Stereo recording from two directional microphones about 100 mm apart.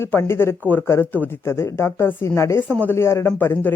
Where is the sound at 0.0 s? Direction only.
25° left (ahead or behind).